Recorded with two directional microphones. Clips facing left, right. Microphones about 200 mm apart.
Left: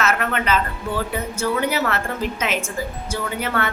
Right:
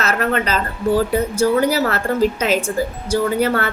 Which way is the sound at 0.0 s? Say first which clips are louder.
Right 3 dB; 35° right (ahead or behind).